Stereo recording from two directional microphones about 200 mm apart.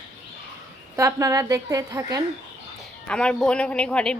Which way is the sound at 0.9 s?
15° right (ahead or behind).